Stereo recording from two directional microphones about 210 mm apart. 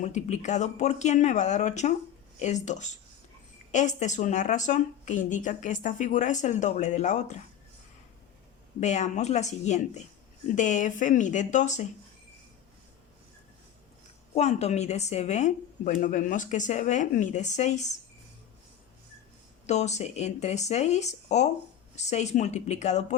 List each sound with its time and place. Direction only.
0.0 s speech: 35° left (ahead or behind)
8.8 s speech: 35° left (ahead or behind)
14.3 s speech: 30° left (ahead or behind)
19.6 s speech: 30° left (ahead or behind)